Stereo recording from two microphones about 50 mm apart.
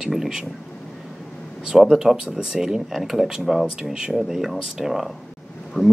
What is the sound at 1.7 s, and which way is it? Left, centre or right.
Speech, centre.